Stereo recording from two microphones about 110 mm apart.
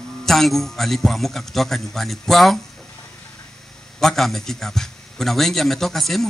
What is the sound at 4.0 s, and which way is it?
A man's voice, centre (ahead or behind).